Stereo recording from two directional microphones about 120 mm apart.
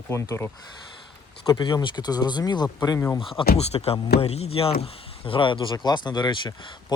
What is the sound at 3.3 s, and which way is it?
Speech, 60° left (ahead or behind).